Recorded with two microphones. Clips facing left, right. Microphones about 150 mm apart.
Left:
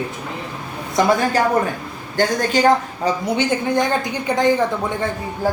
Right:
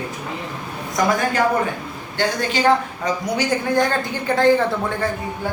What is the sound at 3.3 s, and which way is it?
Speech, 20° left (ahead or behind).